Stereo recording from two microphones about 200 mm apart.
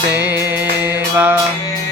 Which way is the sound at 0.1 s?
10° right (ahead or behind).